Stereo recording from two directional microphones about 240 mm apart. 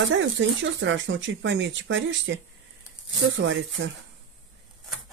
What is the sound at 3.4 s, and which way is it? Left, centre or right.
Speech, right.